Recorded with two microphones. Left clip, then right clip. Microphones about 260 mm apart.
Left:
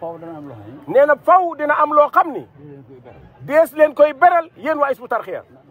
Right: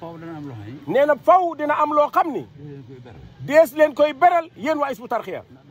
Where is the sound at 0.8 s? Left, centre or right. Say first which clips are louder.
Left 3 dB; right.